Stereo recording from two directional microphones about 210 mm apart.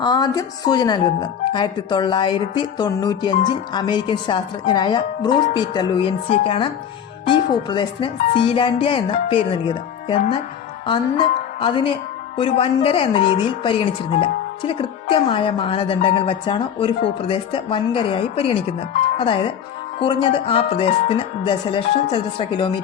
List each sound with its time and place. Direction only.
0.0 s a woman's voice: 20° left (ahead or behind)
10.8 s music: 25° left (ahead or behind)
12.4 s a woman's voice: 25° left (ahead or behind)